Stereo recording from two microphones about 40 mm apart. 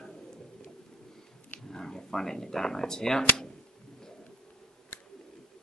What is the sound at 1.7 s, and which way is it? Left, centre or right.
Speech, centre.